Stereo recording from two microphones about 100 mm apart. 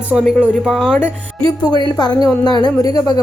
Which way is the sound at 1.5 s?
45° left (ahead or behind).